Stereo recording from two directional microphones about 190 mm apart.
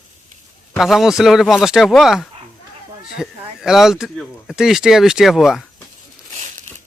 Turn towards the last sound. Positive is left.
turn(degrees=-40)  # may be behind; listen again after turning